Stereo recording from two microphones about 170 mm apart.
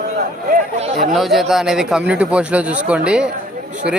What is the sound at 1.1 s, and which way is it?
A man's voice, centre (ahead or behind).